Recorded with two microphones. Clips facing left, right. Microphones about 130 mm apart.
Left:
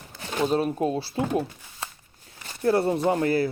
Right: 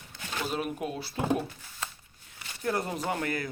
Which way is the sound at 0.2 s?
35° left (ahead or behind).